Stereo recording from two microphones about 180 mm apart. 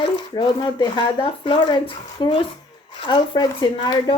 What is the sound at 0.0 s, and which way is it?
Speech, 25° left (ahead or behind).